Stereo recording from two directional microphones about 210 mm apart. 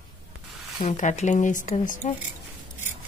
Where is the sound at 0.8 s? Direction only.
35° left (ahead or behind).